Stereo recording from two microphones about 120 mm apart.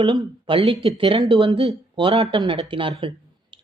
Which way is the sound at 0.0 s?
45° right (ahead or behind).